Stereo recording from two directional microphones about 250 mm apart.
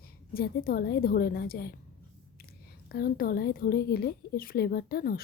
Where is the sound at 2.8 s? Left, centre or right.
Left.